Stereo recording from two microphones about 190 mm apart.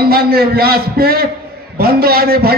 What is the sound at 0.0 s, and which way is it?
A man's voice, 55° right (ahead or behind).